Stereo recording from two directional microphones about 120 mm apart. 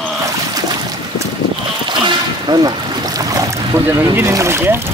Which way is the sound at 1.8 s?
40° right (ahead or behind).